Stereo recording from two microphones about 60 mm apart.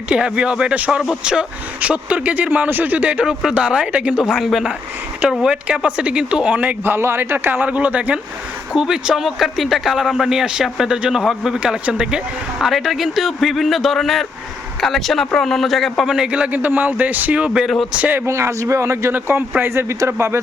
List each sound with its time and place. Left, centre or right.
0.1 s speech: centre
4.3 s a man's voice: centre; by 6.7 s right
6.8 s a man's voice: right
7.3 s speech: right
8.7 s speech: centre
12.5 s a man's voice: centre
16.0 s speech: centre
16.5 s speech: right
18.3 s a man's voice: right
19.1 s a man's voice: right
19.7 s a man's voice: right